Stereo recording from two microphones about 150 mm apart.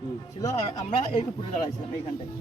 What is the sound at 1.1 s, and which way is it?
Speech, 30° left (ahead or behind).